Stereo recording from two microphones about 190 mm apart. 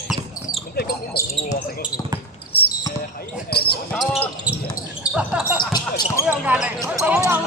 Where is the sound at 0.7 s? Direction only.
55° left (ahead or behind).